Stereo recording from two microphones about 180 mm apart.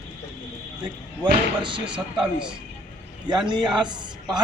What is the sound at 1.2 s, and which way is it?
Speech, 25° right (ahead or behind).